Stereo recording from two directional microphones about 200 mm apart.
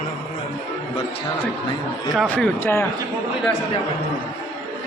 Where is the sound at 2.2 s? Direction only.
5° left (ahead or behind).